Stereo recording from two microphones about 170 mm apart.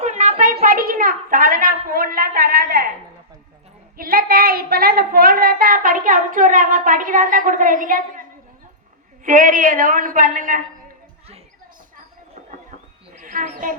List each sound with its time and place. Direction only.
0.0 s a sound: 45° right (ahead or behind); by 2.9 s 60° right (ahead or behind)
3.9 s a woman's voice: 60° right (ahead or behind)
13.2 s a woman's voice: 50° right (ahead or behind)